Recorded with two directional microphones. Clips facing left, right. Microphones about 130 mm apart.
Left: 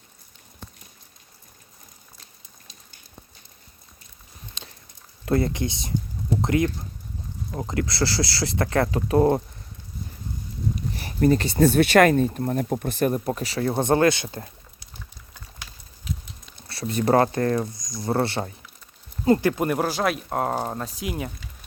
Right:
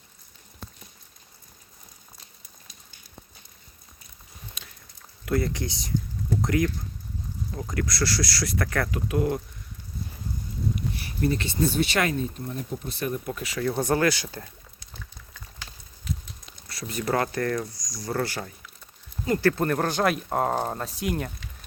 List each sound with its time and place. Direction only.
4.6 s a sound: 30° left (ahead or behind)
5.2 s speech: 25° left (ahead or behind)
7.5 s speech: 35° left (ahead or behind)
10.9 s a sound: 45° left (ahead or behind)
11.5 s speech: 60° left (ahead or behind); by 14.3 s 25° left (ahead or behind)
16.6 s speech: 30° left (ahead or behind)
19.4 s speech: 15° left (ahead or behind)